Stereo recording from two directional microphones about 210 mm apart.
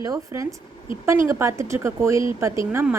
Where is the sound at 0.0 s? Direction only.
15° right (ahead or behind).